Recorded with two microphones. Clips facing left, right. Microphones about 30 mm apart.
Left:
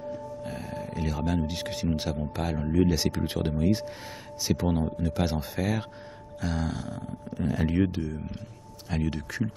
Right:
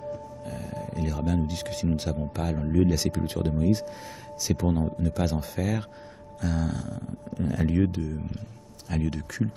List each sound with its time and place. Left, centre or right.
0.4 s speech: left
4.4 s speech: left